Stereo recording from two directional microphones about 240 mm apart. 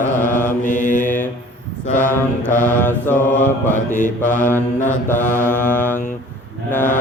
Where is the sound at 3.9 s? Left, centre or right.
Left.